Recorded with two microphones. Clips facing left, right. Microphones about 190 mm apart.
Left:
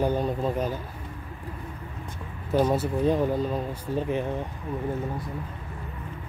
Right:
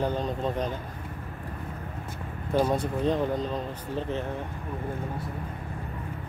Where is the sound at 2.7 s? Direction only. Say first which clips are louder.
Left 2 dB; 5° left (ahead or behind).